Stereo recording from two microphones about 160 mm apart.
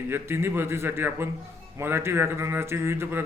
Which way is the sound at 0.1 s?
15° right (ahead or behind).